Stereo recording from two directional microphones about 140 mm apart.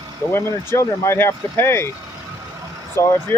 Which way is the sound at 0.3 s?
20° left (ahead or behind).